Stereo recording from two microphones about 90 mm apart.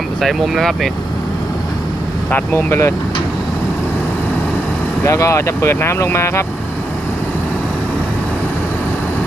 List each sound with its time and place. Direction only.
0.2 s speech: centre (ahead or behind)
2.3 s speech: 25° left (ahead or behind)
5.0 s speech: 35° left (ahead or behind)